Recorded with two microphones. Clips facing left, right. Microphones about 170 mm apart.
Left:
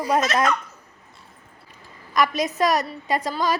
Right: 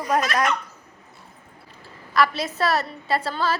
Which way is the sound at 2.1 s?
15° left (ahead or behind).